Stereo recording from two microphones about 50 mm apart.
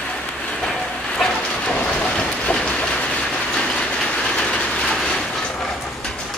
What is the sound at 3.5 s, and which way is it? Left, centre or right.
Train, centre.